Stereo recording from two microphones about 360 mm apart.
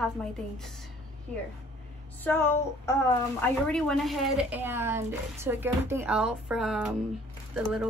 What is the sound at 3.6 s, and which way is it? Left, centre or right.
A woman's voice, centre.